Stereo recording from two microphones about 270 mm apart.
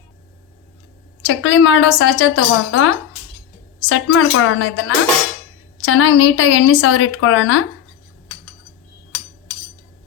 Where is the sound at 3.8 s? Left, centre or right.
Left.